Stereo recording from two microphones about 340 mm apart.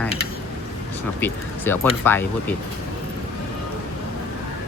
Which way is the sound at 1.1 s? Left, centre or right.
Centre.